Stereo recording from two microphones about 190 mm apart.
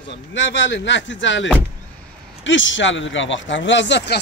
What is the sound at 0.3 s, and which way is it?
Speech, 70° left (ahead or behind).